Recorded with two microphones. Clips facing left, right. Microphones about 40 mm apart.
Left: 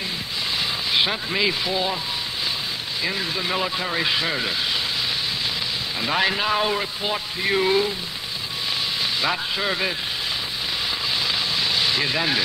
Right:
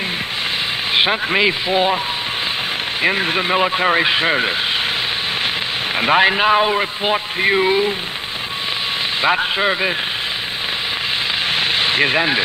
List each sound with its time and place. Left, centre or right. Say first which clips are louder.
0.9 s a man's voice: right 7 dB; right
3.0 s a man's voice: right 9 dB; right
5.9 s a man's voice: right 8 dB; right
9.2 s a man's voice: right 10 dB; right
11.5 s rain on surface: right 6 dB; right